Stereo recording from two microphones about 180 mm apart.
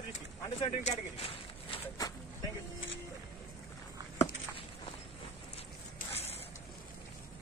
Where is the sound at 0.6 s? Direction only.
35° left (ahead or behind).